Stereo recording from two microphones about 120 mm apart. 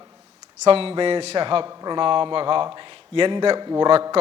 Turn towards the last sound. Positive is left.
turn(degrees=-45)  # may be behind; listen again after turning